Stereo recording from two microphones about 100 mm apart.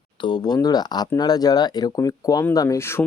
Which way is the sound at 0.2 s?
45° left (ahead or behind).